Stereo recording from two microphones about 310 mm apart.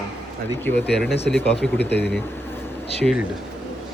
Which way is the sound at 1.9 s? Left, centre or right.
Left.